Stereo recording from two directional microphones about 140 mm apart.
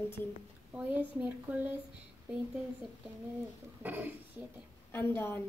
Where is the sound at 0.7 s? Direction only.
10° right (ahead or behind).